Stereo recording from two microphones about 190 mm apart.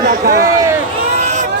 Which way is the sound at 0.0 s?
50° right (ahead or behind).